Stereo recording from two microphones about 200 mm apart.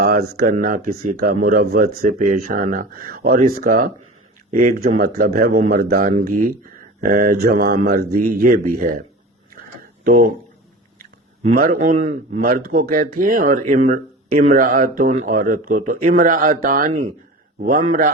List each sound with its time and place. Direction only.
0.0 s speech: 50° right (ahead or behind)
9.6 s a sound: 45° right (ahead or behind)
11.4 s speech: 45° right (ahead or behind)